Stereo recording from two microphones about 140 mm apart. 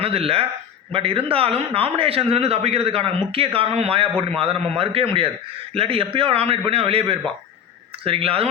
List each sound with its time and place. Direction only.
0.0 s a man's voice: 45° right (ahead or behind)
8.0 s a man's voice: 40° right (ahead or behind)